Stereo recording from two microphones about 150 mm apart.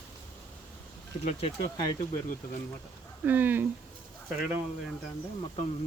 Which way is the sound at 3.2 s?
10° right (ahead or behind).